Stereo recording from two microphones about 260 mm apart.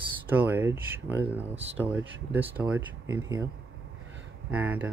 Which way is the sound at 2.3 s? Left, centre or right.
Centre.